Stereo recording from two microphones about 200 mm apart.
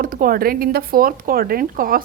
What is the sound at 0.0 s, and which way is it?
A woman's voice, 45° right (ahead or behind).